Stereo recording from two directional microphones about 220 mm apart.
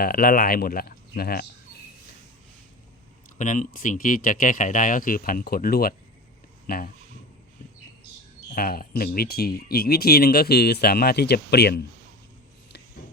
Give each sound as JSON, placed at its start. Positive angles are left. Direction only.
{"t": 0.0, "sound": "speech", "side_deg": 40}
{"t": 3.3, "sound": "speech", "side_deg": 35}
{"t": 8.5, "sound": "speech", "side_deg": 40}